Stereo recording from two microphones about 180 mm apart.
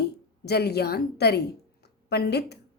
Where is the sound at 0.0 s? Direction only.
65° left (ahead or behind).